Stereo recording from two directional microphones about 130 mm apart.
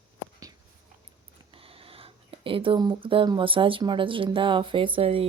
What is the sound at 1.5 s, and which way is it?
Speech, 45° right (ahead or behind).